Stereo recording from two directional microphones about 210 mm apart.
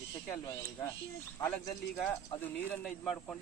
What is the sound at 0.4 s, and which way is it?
Speech, 15° left (ahead or behind).